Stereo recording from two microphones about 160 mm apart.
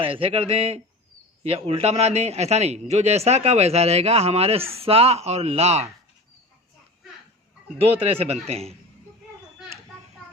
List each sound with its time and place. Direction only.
0.0 s a man's voice: 35° right (ahead or behind)
7.8 s a man's voice: 40° right (ahead or behind)